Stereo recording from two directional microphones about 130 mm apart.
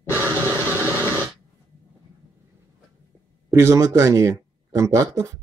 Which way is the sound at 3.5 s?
20° right (ahead or behind).